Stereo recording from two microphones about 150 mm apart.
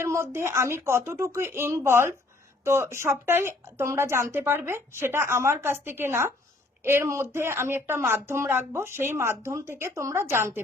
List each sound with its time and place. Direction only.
0.0 s speech: 15° right (ahead or behind)